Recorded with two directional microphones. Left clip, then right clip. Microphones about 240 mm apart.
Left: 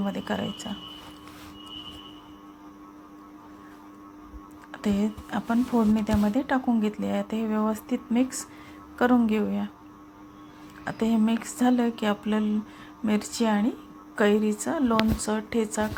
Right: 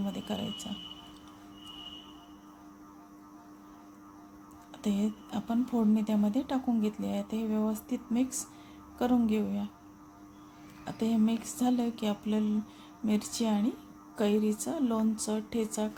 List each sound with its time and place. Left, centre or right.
0.0 s speech: centre
4.7 s speech: centre
10.8 s speech: centre